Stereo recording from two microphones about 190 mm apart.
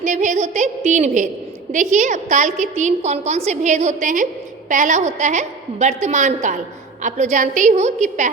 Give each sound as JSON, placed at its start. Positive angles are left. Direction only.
{"t": 0.0, "sound": "a woman's voice", "side_deg": -40}